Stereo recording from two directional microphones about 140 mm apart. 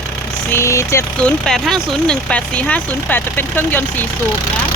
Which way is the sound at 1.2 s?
5° left (ahead or behind).